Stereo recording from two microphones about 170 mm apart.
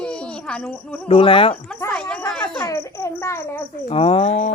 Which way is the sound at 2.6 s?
15° left (ahead or behind).